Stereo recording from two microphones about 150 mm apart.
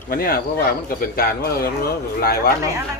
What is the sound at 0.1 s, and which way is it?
Speech, 75° left (ahead or behind).